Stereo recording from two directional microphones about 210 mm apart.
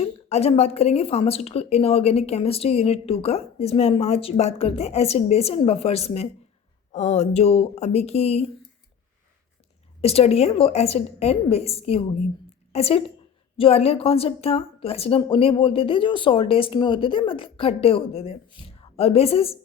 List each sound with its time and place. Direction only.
0.0 s speech: 30° left (ahead or behind)
10.0 s a woman's voice: 30° left (ahead or behind)